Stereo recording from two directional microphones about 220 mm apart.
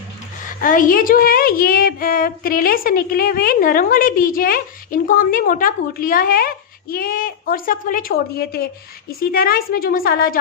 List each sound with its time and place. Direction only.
0.6 s a woman's voice: 40° left (ahead or behind)